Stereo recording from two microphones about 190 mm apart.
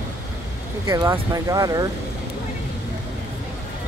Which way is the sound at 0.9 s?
15° right (ahead or behind).